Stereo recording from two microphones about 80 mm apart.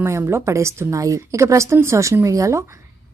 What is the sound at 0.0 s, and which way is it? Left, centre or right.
A woman's voice, right.